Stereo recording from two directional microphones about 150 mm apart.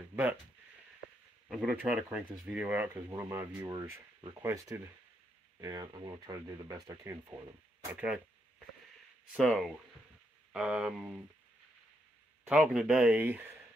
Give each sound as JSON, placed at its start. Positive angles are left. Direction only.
{"t": 0.1, "sound": "a sound", "side_deg": -15}
{"t": 1.5, "sound": "speech", "side_deg": 0}
{"t": 7.9, "sound": "speech", "side_deg": -10}
{"t": 9.4, "sound": "speech", "side_deg": 0}
{"t": 12.4, "sound": "speech", "side_deg": -5}